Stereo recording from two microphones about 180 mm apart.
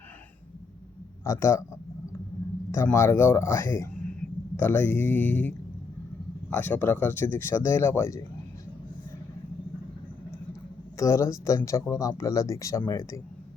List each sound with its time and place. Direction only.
1.2 s speech: 15° left (ahead or behind)
2.7 s speech: 15° left (ahead or behind)
10.9 s speech: 15° left (ahead or behind)